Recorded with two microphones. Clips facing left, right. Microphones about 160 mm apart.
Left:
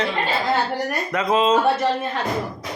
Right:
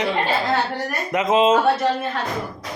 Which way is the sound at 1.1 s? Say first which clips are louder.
Right 3 dB; 20° right (ahead or behind).